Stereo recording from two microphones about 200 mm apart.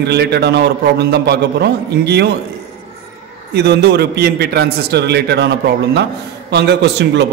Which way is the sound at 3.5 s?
55° right (ahead or behind).